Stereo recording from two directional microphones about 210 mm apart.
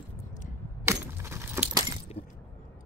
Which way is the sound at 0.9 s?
10° right (ahead or behind).